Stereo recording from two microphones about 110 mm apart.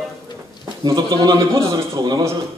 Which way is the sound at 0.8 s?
35° right (ahead or behind).